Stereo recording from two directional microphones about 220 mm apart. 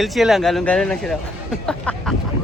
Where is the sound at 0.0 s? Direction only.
Centre (ahead or behind).